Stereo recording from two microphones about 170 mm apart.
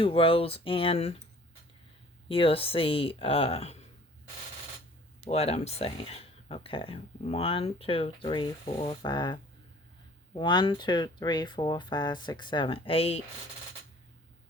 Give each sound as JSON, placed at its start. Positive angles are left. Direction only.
{"t": 0.0, "sound": "speech", "side_deg": 30}
{"t": 2.3, "sound": "speech", "side_deg": 35}
{"t": 5.2, "sound": "speech", "side_deg": 35}